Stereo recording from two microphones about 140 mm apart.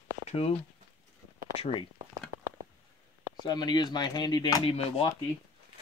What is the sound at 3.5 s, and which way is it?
Speech, 30° left (ahead or behind).